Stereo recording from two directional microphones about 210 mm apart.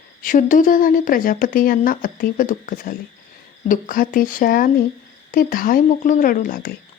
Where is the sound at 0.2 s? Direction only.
40° left (ahead or behind).